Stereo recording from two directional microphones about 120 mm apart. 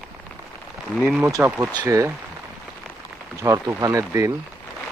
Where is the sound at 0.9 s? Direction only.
Centre (ahead or behind).